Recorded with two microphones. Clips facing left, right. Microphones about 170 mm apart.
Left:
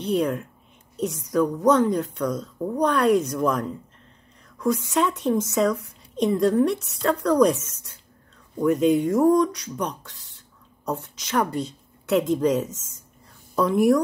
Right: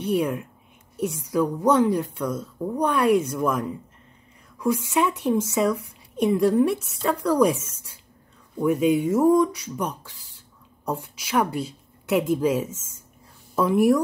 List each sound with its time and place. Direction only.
0.0 s a woman's voice: 5° right (ahead or behind)
8.5 s speech: 5° right (ahead or behind)
10.1 s a sound: 70° left (ahead or behind)
10.9 s a woman's voice: 10° right (ahead or behind)